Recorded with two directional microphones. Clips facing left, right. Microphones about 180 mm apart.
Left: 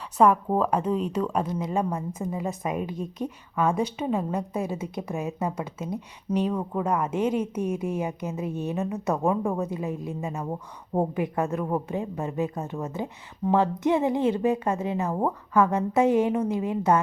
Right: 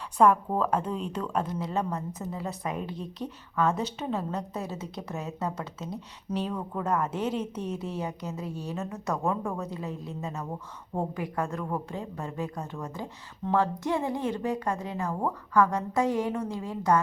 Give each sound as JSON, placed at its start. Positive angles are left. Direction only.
{"t": 0.2, "sound": "a woman's voice", "side_deg": 10}
{"t": 7.6, "sound": "a woman's voice", "side_deg": 50}
{"t": 7.9, "sound": "a woman's voice", "side_deg": 15}